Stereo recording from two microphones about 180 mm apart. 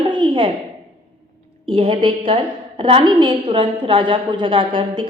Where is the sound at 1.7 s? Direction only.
30° right (ahead or behind).